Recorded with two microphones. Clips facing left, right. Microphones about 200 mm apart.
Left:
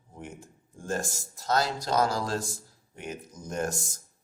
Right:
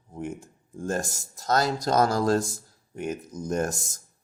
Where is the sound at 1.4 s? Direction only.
45° right (ahead or behind).